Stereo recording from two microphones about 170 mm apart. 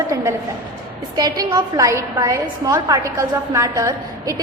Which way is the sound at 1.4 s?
20° right (ahead or behind).